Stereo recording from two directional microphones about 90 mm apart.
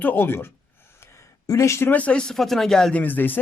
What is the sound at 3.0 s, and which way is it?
Speech, 20° left (ahead or behind).